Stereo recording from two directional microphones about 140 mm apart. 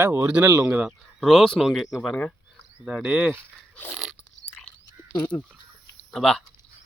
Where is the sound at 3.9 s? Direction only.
Centre (ahead or behind).